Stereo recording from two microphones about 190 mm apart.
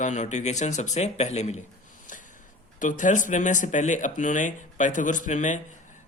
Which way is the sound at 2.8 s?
40° left (ahead or behind).